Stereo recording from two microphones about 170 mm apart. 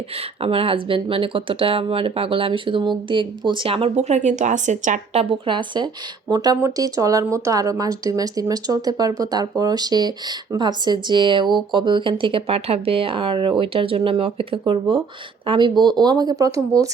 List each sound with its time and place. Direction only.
0.2 s speech: 35° right (ahead or behind)
5.2 s speech: 30° right (ahead or behind)